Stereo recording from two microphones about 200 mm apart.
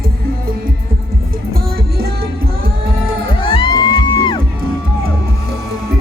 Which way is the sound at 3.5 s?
25° left (ahead or behind).